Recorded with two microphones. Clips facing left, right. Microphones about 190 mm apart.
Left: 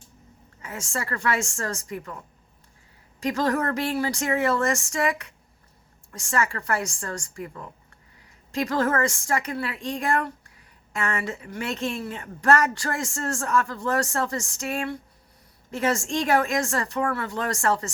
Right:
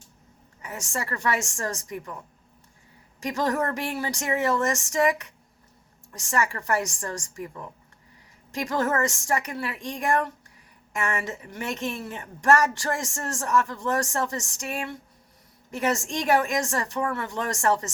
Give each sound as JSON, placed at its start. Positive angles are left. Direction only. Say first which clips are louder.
{"t": 0.6, "sound": "a woman's voice", "louder": "left 1 dB", "side_deg": -15}
{"t": 3.2, "sound": "a woman's voice", "louder": "left 2 dB", "side_deg": -15}
{"t": 8.7, "sound": "a woman's voice", "louder": "left 1 dB", "side_deg": -15}